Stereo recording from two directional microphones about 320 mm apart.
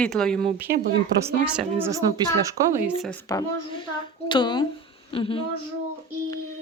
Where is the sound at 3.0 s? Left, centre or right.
Centre.